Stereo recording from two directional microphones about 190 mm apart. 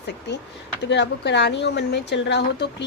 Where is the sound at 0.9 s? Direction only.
65° left (ahead or behind).